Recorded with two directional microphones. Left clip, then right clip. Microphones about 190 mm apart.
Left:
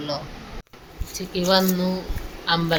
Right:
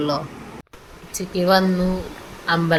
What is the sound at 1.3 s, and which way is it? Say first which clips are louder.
Speech: right 3 dB; 10° right (ahead or behind).